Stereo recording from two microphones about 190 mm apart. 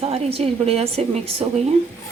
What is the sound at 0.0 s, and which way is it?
Speech, 30° right (ahead or behind).